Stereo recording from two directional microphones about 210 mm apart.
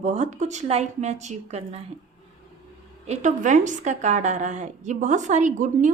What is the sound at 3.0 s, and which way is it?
Speech, 35° right (ahead or behind).